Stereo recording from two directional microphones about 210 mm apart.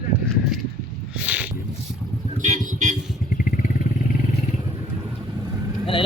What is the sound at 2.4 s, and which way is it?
Speech, 35° right (ahead or behind).